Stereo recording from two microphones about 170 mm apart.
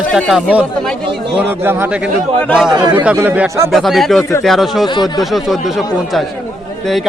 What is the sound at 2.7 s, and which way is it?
Speech, 25° right (ahead or behind).